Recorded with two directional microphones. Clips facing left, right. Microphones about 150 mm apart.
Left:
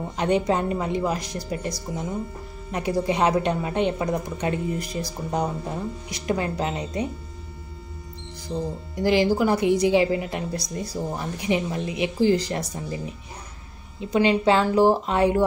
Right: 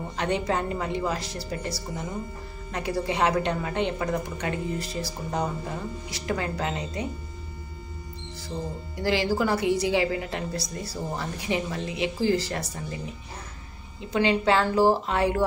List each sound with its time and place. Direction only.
0.2 s a woman's voice: 20° left (ahead or behind)
8.5 s a woman's voice: 15° left (ahead or behind)
14.1 s a woman's voice: 20° left (ahead or behind)